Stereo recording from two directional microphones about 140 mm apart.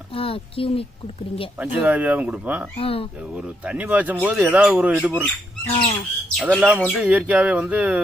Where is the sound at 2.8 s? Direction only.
40° left (ahead or behind).